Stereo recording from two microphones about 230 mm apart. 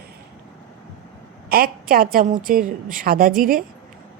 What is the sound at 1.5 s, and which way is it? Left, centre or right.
A woman's voice, right.